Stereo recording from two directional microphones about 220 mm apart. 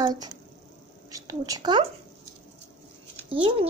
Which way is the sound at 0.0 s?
15° right (ahead or behind).